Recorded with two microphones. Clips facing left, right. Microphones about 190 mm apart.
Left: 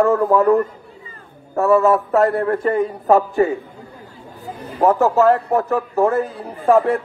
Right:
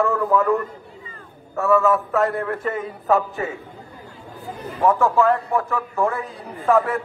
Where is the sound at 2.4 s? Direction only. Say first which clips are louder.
Left 7 dB; 35° left (ahead or behind).